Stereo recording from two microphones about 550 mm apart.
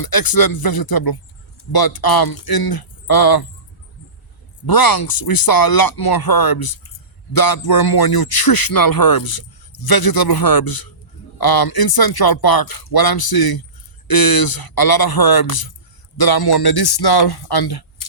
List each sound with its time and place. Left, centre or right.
0.0 s speech: left
4.6 s speech: left